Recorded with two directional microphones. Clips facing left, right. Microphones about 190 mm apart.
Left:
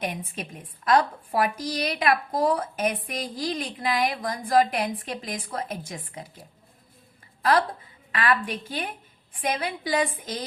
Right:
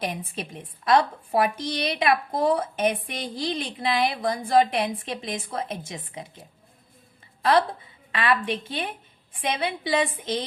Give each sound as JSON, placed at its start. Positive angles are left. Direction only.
{"t": 0.0, "sound": "a woman's voice", "side_deg": -30}
{"t": 8.1, "sound": "a woman's voice", "side_deg": -25}